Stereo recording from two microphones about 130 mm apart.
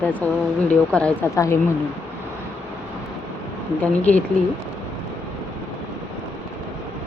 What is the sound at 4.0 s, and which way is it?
Speech, 10° left (ahead or behind).